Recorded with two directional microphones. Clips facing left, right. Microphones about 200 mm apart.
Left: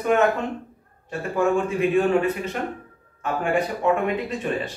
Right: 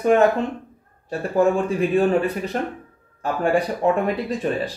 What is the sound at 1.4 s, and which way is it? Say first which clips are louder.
Speech: right 2 dB; 35° right (ahead or behind).